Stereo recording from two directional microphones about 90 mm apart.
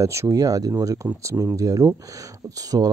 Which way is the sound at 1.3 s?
25° right (ahead or behind).